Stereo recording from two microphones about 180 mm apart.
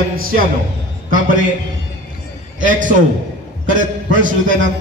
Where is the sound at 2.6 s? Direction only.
45° right (ahead or behind).